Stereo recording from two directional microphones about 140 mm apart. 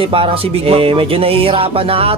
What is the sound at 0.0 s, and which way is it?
Music, 40° right (ahead or behind).